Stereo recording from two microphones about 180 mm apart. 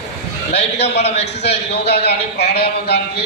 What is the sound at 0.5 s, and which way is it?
Speech, 35° left (ahead or behind).